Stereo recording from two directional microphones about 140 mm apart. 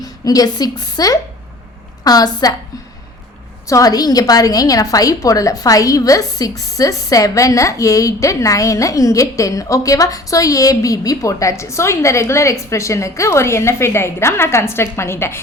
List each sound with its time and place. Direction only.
0.0 s a woman's voice: 25° left (ahead or behind)
3.7 s a woman's voice: 25° left (ahead or behind)